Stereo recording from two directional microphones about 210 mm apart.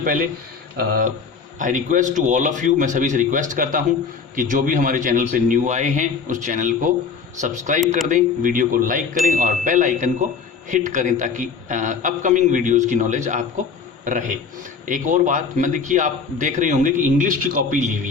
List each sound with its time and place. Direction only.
0.0 s a man's voice: 40° right (ahead or behind)
1.5 s a man's voice: 40° right (ahead or behind)